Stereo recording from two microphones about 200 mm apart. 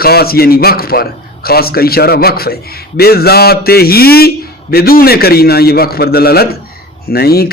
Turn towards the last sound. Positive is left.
turn(degrees=50)  # may be behind; listen again after turning